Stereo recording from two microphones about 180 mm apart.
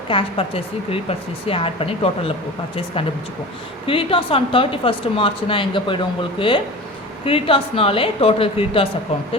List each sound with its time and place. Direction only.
0.1 s a woman's voice: 30° left (ahead or behind)
3.8 s a woman's voice: 30° left (ahead or behind)